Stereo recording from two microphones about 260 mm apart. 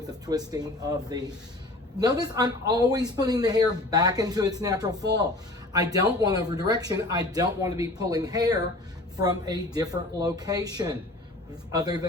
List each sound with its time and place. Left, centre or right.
0.3 s speech: centre